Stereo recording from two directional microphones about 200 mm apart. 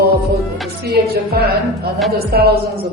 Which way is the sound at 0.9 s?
50° right (ahead or behind).